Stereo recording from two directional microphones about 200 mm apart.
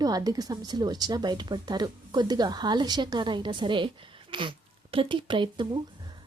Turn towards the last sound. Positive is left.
turn(degrees=-25)  # may be behind; listen again after turning